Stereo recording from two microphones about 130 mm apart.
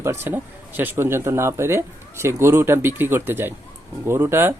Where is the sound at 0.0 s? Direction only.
20° right (ahead or behind).